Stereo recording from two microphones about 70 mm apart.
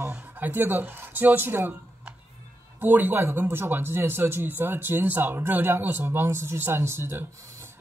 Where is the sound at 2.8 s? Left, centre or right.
Right.